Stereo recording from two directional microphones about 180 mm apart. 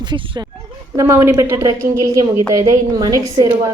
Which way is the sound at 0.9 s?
15° right (ahead or behind).